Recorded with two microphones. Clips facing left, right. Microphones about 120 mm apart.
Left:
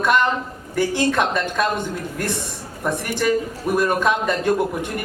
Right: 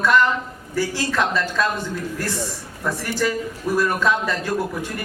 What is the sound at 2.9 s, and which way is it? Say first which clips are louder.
A man's voice: left 2 dB; 20° left (ahead or behind).